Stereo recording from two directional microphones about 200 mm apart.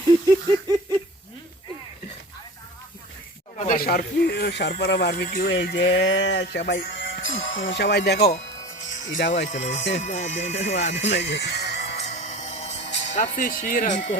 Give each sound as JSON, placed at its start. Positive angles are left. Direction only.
{"t": 3.6, "sound": "speech", "side_deg": 45}
{"t": 8.8, "sound": "music", "side_deg": 40}
{"t": 9.3, "sound": "speech", "side_deg": 35}
{"t": 11.0, "sound": "speech", "side_deg": 60}
{"t": 11.9, "sound": "a sound", "side_deg": 35}
{"t": 13.1, "sound": "speech", "side_deg": 40}